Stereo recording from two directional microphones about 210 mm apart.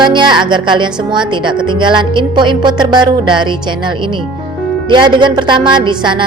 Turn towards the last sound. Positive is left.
turn(degrees=-20)  # may be behind; listen again after turning